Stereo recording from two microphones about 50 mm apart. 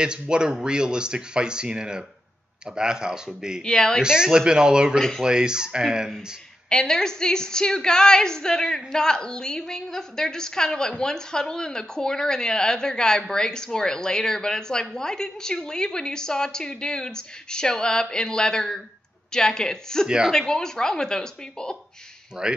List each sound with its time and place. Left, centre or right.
0.0 s speech: centre
3.6 s a woman's voice: centre
4.0 s speech: centre
6.7 s a woman's voice: centre
22.4 s speech: centre